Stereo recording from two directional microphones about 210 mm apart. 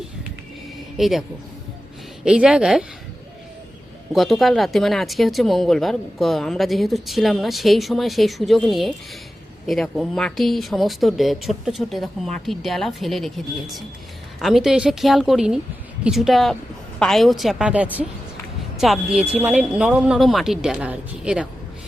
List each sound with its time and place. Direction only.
0.9 s a man's voice: centre (ahead or behind)
2.2 s speech: 5° right (ahead or behind)
4.1 s speech: centre (ahead or behind)